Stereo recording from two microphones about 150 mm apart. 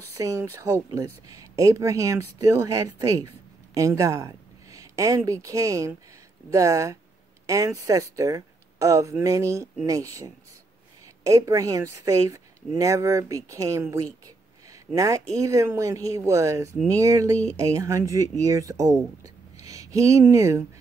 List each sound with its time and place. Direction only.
0.1 s a woman's voice: 20° right (ahead or behind)